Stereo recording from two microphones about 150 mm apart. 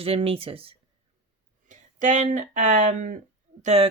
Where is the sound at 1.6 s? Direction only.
55° right (ahead or behind).